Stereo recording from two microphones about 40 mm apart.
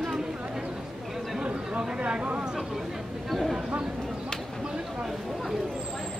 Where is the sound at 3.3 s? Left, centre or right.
Centre.